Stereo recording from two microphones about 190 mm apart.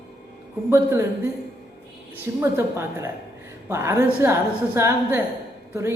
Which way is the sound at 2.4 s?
10° right (ahead or behind).